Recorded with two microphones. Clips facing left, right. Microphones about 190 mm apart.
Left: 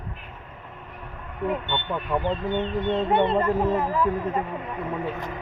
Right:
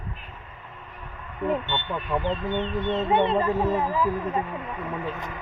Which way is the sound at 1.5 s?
Centre (ahead or behind).